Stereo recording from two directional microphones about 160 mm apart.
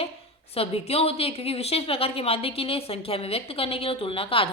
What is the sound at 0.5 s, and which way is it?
A woman's voice, 35° left (ahead or behind).